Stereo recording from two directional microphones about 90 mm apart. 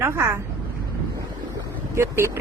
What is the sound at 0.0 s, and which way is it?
Speech, 30° right (ahead or behind).